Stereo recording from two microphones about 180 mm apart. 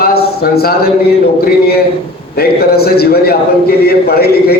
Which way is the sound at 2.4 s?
60° left (ahead or behind).